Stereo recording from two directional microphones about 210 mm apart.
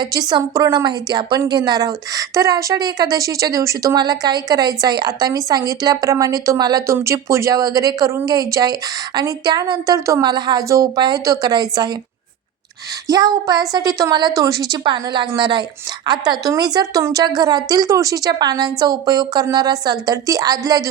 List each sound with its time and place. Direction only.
0.0 s a woman's voice: 20° right (ahead or behind)
13.1 s a woman's voice: 20° right (ahead or behind)